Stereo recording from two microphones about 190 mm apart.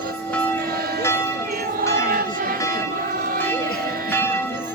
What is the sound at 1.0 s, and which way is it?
Music, 15° left (ahead or behind).